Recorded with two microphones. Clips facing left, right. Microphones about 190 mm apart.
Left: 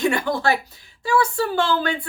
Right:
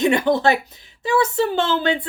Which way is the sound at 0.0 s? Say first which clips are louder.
Right 4 dB; 20° right (ahead or behind).